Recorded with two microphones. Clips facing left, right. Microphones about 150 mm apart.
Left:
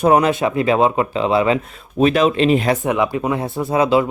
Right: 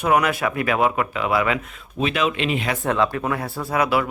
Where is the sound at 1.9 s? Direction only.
40° left (ahead or behind).